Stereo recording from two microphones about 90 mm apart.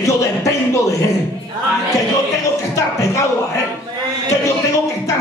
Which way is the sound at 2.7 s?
35° left (ahead or behind).